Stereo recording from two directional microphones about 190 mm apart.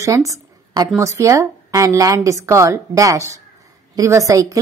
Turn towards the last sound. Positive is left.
turn(degrees=-15)  # may be behind; listen again after turning